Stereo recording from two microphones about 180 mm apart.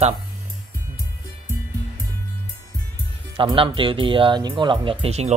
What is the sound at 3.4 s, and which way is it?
Speech, 30° right (ahead or behind).